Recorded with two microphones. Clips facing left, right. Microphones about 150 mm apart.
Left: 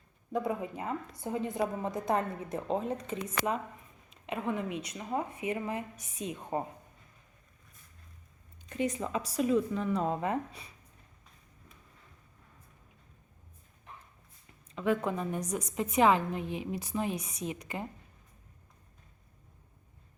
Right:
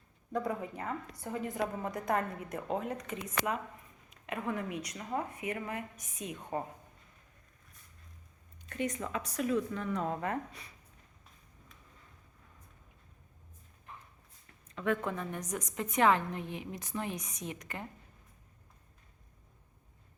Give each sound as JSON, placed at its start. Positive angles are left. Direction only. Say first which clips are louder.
{"t": 0.3, "sound": "a woman's voice", "louder": "left 2 dB", "side_deg": 20}
{"t": 8.7, "sound": "a woman's voice", "louder": "left 3 dB", "side_deg": 25}
{"t": 14.8, "sound": "a woman's voice", "louder": "left 3 dB", "side_deg": 20}
{"t": 17.2, "sound": "a woman's voice", "louder": "left 5 dB", "side_deg": 30}
{"t": 17.5, "sound": "speech", "louder": "left 4 dB", "side_deg": 15}